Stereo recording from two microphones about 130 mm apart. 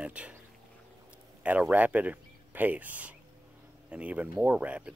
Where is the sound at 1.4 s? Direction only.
10° right (ahead or behind).